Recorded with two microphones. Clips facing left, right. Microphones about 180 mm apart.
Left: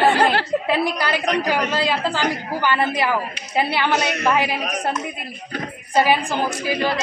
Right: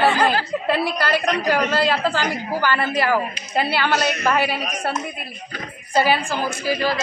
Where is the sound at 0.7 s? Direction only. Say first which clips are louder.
Right 3 dB; 15° left (ahead or behind).